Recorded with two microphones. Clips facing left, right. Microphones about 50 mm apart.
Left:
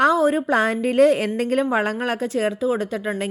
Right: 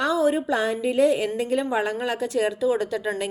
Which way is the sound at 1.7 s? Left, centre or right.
Left.